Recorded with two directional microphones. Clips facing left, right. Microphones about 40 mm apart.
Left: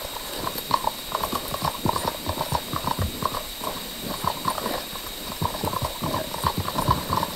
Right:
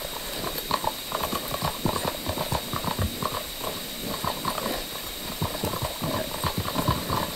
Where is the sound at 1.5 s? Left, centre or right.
Centre.